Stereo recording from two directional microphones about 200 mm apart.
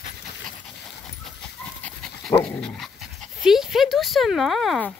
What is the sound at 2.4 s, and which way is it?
Speech, 5° left (ahead or behind).